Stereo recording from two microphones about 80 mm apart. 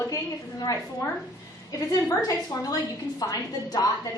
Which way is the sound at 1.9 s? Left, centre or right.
Left.